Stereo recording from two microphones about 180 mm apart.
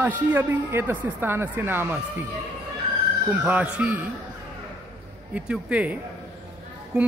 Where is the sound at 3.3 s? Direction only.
10° right (ahead or behind).